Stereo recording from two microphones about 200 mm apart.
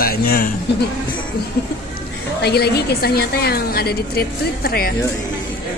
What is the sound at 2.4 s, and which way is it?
A woman's voice, 55° left (ahead or behind).